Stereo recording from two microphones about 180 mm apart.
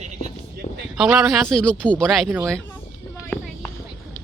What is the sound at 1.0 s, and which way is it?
Speech, centre (ahead or behind).